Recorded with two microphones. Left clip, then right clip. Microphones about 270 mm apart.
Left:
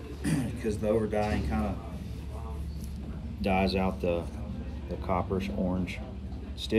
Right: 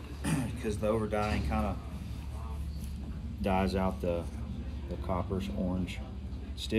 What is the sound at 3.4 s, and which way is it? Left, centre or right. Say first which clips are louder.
Speech: left 3 dB; centre.